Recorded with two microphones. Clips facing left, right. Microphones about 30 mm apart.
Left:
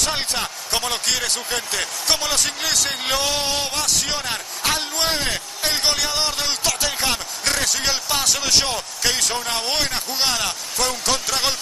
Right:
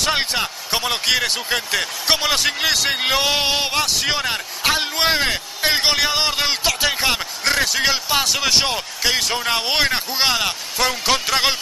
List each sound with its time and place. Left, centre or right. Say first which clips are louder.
0.0 s a man's voice: right 4 dB; right